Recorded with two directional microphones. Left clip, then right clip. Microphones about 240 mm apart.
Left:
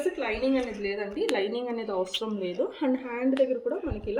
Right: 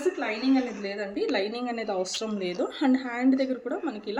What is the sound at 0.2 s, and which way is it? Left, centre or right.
Speech, centre.